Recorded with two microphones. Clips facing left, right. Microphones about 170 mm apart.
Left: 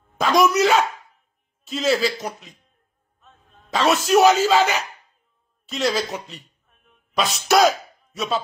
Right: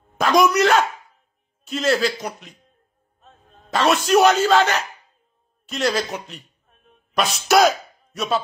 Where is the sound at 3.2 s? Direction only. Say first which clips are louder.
Right 3 dB; 35° right (ahead or behind).